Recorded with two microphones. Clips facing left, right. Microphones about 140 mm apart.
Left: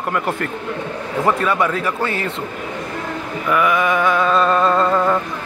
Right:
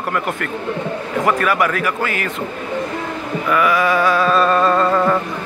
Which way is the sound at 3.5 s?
20° left (ahead or behind).